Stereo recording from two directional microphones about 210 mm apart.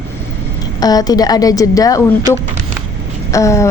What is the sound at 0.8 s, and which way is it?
A woman's voice, 20° left (ahead or behind).